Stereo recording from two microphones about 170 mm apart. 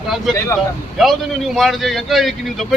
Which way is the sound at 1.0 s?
Centre (ahead or behind).